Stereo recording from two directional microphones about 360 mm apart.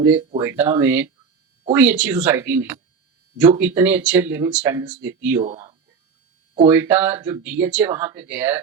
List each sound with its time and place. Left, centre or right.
0.3 s speech: centre